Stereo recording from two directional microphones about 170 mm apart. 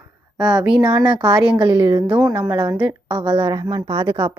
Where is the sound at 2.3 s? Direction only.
10° right (ahead or behind).